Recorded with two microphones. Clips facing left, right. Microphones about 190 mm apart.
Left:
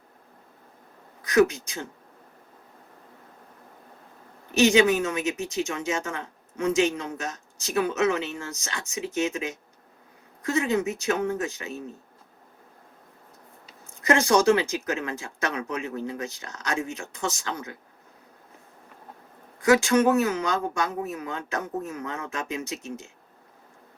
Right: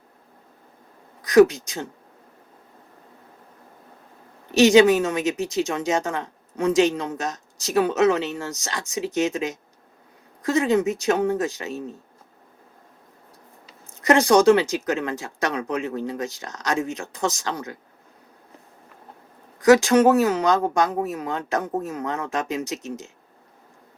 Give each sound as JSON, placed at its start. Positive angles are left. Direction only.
{"t": 1.2, "sound": "speech", "side_deg": -35}
{"t": 4.5, "sound": "speech", "side_deg": -35}
{"t": 14.0, "sound": "speech", "side_deg": -35}
{"t": 19.6, "sound": "speech", "side_deg": -35}